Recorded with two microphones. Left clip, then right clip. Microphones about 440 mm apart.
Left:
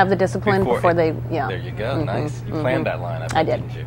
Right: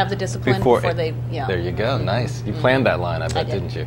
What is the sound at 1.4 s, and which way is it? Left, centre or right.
Speech, right.